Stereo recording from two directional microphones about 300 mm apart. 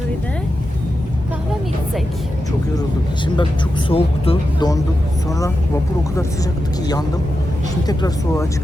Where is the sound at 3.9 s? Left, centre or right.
Centre.